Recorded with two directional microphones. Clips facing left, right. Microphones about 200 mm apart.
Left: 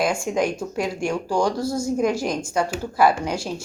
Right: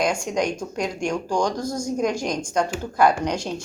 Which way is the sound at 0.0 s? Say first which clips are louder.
Left 1 dB; 5° left (ahead or behind).